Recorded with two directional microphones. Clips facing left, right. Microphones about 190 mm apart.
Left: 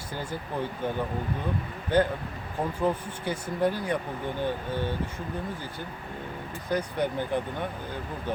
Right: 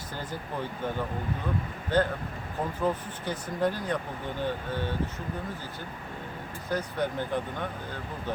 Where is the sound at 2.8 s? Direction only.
10° left (ahead or behind).